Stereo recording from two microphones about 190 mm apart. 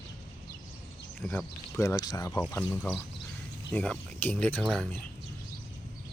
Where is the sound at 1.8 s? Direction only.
20° left (ahead or behind); by 4.8 s centre (ahead or behind).